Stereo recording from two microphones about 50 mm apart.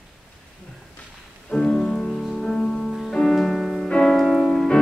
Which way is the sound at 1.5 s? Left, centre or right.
Left.